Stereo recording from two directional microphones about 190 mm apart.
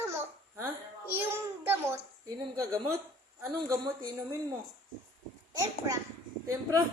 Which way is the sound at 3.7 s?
20° right (ahead or behind).